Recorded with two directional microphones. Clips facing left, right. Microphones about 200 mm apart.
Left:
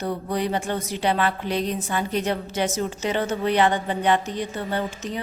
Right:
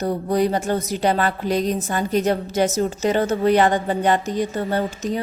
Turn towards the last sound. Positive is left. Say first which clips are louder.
# right 5 dB
turn(degrees=-40)  # may be behind; listen again after turning